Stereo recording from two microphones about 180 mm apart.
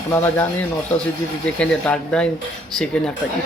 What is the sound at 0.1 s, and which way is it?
Speech, 15° left (ahead or behind).